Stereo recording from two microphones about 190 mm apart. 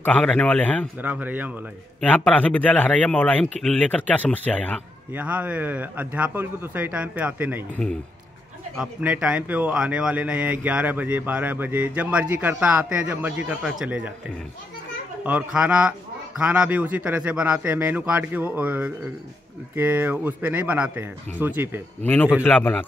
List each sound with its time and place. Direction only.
0.0 s a man's voice: 5° left (ahead or behind)
1.0 s speech: 10° right (ahead or behind)
2.0 s a man's voice: 5° left (ahead or behind)
5.1 s speech: 10° right (ahead or behind)
9.0 s speech: 5° right (ahead or behind)
15.2 s speech: 5° right (ahead or behind)
22.0 s a man's voice: 10° left (ahead or behind)